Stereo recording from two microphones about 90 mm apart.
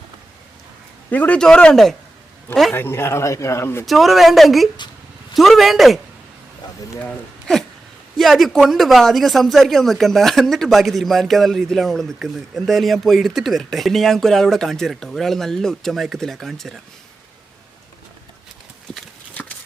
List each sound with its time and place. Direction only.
1.1 s a man's voice: 20° left (ahead or behind)
2.7 s a man's voice: 25° left (ahead or behind)
3.8 s a man's voice: centre (ahead or behind)
7.0 s a man's voice: 10° left (ahead or behind)